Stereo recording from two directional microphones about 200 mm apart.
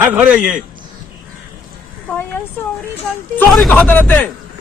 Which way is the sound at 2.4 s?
10° left (ahead or behind).